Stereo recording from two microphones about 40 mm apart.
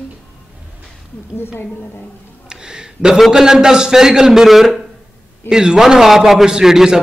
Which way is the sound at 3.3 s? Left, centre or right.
Centre.